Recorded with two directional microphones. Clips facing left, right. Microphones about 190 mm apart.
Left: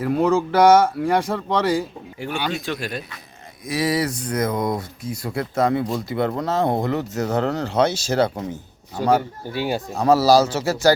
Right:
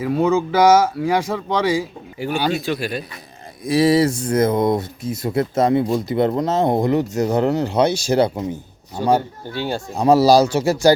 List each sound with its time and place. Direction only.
0.0 s speech: centre (ahead or behind)
2.3 s speech: 35° right (ahead or behind)
2.6 s speech: 5° right (ahead or behind)
3.6 s speech: 30° right (ahead or behind); by 8.4 s 15° right (ahead or behind)
9.1 s speech: 10° left (ahead or behind)
9.9 s a man's voice: 15° right (ahead or behind)